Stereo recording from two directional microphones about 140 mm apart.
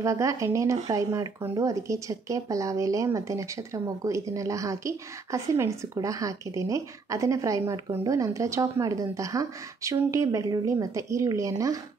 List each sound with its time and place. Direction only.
0.0 s speech: 25° right (ahead or behind)